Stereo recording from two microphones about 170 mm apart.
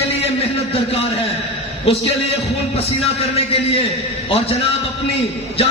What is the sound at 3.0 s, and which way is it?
A man's voice, 35° left (ahead or behind).